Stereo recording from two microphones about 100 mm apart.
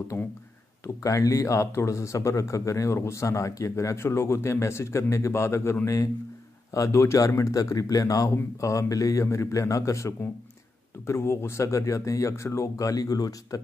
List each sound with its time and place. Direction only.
0.8 s speech: 30° left (ahead or behind)